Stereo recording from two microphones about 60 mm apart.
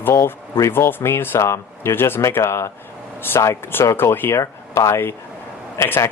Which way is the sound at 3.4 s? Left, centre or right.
Left.